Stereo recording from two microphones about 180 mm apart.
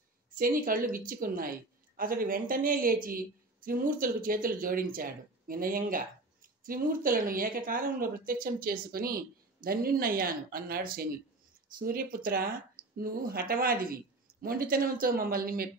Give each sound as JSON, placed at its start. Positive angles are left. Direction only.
{"t": 0.4, "sound": "a woman's voice", "side_deg": -50}